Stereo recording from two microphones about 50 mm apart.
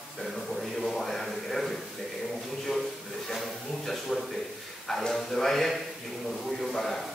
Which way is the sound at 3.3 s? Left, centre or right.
Centre.